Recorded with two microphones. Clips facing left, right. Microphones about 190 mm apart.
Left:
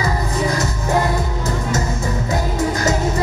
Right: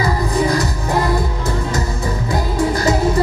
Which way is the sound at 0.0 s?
35° right (ahead or behind).